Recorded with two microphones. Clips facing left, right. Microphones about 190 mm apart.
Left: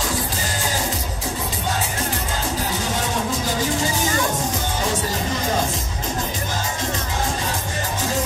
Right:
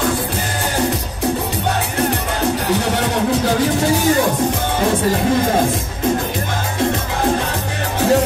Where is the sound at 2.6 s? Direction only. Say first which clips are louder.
Right 7 dB; 65° right (ahead or behind).